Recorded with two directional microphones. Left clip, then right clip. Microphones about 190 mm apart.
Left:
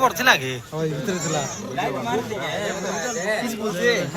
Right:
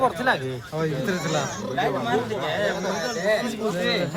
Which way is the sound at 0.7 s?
25° left (ahead or behind).